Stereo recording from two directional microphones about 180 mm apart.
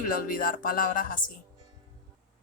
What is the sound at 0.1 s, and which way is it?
Speech, 50° left (ahead or behind).